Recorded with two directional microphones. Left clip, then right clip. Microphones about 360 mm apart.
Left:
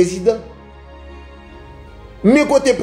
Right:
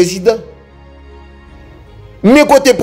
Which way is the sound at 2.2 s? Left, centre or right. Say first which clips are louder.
Right 6 dB; right.